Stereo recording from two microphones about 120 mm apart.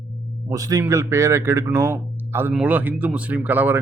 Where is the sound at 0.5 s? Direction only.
30° right (ahead or behind).